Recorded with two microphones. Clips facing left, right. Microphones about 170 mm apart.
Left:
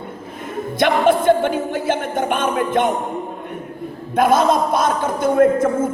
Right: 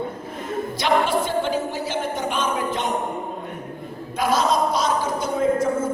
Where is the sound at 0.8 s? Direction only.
55° left (ahead or behind).